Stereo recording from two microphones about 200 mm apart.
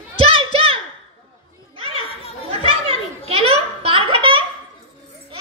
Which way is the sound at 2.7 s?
30° right (ahead or behind).